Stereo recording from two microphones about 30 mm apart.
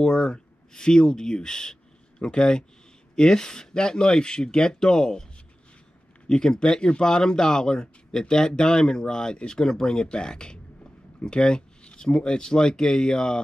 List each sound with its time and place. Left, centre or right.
0.0 s speech: centre
6.2 s speech: left